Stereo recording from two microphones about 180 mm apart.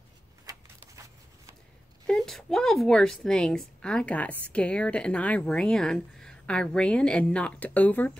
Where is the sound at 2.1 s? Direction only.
Centre (ahead or behind).